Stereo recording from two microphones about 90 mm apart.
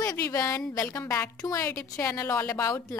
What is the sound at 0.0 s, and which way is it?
A woman's voice, 40° left (ahead or behind).